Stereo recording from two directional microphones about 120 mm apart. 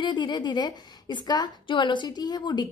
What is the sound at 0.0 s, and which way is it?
A woman's voice, 40° left (ahead or behind).